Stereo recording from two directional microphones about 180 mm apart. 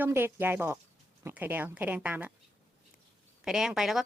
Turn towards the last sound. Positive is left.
turn(degrees=0)  # may be behind; listen again after turning